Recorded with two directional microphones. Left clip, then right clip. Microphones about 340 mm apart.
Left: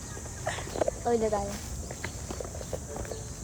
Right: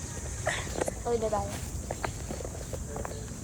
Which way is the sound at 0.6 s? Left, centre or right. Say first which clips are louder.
Left 3 dB; left.